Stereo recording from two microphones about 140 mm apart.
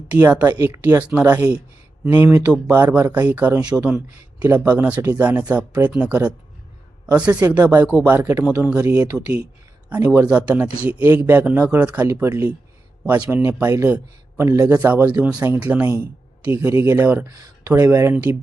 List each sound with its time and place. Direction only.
0.1 s speech: 15° right (ahead or behind)
15.4 s speech: 20° right (ahead or behind)
17.2 s speech: 25° right (ahead or behind)